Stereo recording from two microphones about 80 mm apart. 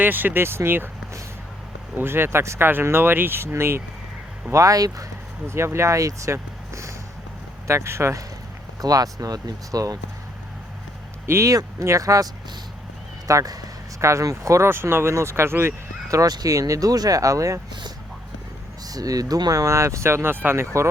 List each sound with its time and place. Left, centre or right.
0.0 s speech: right
2.0 s speech: right
4.5 s speech: right
5.5 s speech: right
8.8 s speech: right
11.3 s speech: right
16.0 s speech: right
18.9 s speech: right